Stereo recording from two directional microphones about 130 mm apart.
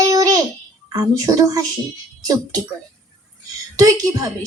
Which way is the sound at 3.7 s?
25° right (ahead or behind).